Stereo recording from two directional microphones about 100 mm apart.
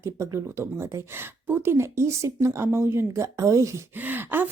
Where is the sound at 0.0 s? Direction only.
30° right (ahead or behind).